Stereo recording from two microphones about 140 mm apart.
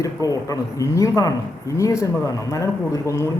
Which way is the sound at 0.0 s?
25° left (ahead or behind).